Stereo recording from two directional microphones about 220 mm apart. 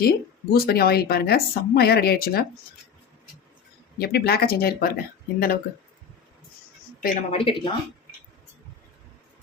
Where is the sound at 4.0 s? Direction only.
45° left (ahead or behind).